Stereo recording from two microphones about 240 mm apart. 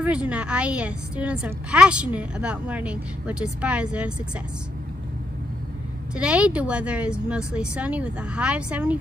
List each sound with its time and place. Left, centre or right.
0.0 s a woman's voice: centre
6.1 s a woman's voice: centre